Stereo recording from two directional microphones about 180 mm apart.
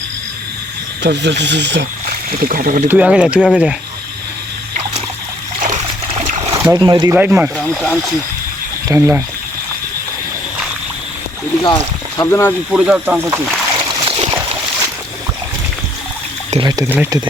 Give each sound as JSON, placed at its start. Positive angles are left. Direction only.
{"t": 1.0, "sound": "speech", "side_deg": -75}
{"t": 2.0, "sound": "speech", "side_deg": -55}
{"t": 2.9, "sound": "speech", "side_deg": -5}
{"t": 5.5, "sound": "splash", "side_deg": -45}
{"t": 6.1, "sound": "a sound", "side_deg": -35}
{"t": 6.7, "sound": "speech", "side_deg": -25}
{"t": 7.1, "sound": "speech", "side_deg": -10}
{"t": 8.9, "sound": "speech", "side_deg": -15}
{"t": 11.6, "sound": "speech", "side_deg": 25}
{"t": 12.7, "sound": "speech", "side_deg": -5}
{"t": 14.0, "sound": "a sound", "side_deg": -30}
{"t": 16.5, "sound": "speech", "side_deg": -25}